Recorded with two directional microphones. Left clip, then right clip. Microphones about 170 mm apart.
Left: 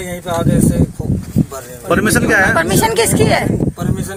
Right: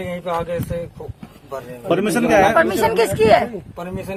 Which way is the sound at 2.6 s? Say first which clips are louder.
Left 2 dB; 25° left (ahead or behind).